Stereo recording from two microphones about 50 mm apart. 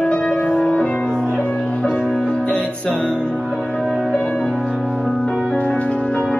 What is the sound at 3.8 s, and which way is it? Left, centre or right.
Music, centre.